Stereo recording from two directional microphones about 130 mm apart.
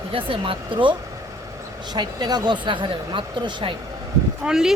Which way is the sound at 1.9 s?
35° right (ahead or behind).